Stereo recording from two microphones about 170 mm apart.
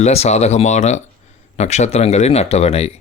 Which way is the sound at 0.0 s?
40° left (ahead or behind).